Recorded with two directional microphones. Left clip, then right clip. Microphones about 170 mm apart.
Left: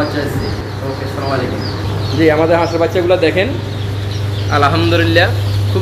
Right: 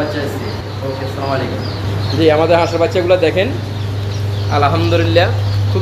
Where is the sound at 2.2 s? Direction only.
25° right (ahead or behind).